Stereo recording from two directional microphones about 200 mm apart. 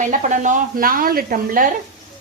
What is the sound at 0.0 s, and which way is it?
Speech, 35° right (ahead or behind).